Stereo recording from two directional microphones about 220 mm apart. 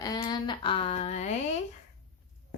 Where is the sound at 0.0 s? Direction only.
20° left (ahead or behind).